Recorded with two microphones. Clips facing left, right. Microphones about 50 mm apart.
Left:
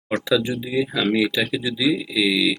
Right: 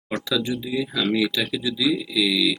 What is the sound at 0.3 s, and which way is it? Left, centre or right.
Speech, centre.